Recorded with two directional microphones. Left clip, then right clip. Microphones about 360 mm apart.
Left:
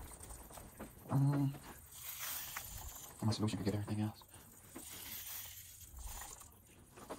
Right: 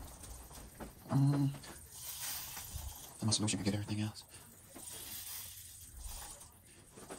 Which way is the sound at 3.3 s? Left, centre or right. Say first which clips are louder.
Right 4 dB; centre.